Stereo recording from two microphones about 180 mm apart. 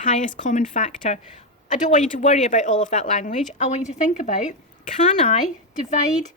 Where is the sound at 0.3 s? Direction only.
45° left (ahead or behind).